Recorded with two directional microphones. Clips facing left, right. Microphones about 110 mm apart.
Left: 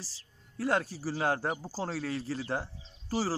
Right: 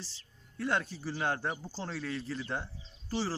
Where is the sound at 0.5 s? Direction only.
35° left (ahead or behind).